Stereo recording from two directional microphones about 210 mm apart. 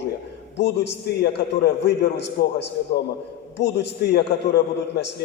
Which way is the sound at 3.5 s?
55° left (ahead or behind).